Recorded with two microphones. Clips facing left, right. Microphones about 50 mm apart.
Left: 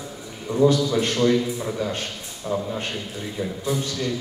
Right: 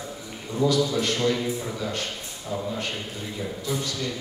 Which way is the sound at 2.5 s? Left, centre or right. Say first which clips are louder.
Left 5 dB; left.